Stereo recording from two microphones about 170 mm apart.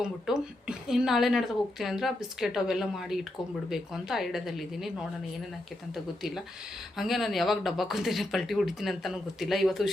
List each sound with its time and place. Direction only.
0.0 s speech: 5° right (ahead or behind)
6.9 s speech: centre (ahead or behind)